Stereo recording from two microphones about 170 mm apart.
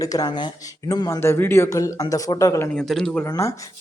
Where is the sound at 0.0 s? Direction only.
20° left (ahead or behind).